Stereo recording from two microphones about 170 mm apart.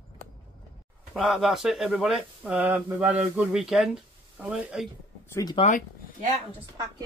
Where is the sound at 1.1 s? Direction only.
Centre (ahead or behind).